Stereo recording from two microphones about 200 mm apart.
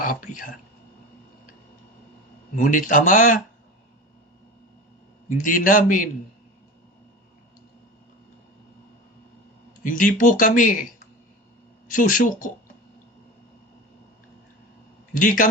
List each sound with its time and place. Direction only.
0.0 s speech: 40° left (ahead or behind)
2.6 s speech: 40° left (ahead or behind)
5.4 s speech: 40° left (ahead or behind)
9.8 s speech: 40° left (ahead or behind)
11.9 s speech: 40° left (ahead or behind)
15.1 s speech: 40° left (ahead or behind)